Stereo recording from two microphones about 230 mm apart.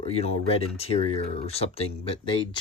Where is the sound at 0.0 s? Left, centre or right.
Left.